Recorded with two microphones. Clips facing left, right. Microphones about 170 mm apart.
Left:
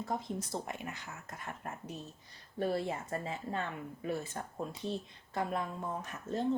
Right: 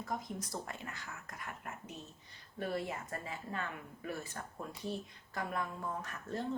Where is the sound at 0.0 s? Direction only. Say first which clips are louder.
Left 4 dB; 30° left (ahead or behind).